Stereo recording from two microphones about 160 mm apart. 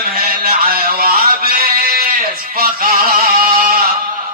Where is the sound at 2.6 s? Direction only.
65° right (ahead or behind).